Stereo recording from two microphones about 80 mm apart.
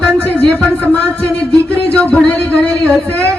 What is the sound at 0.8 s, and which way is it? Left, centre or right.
Speech, centre.